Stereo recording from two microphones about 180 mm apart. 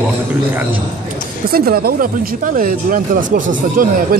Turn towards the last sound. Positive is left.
turn(degrees=-50)  # may be behind; listen again after turning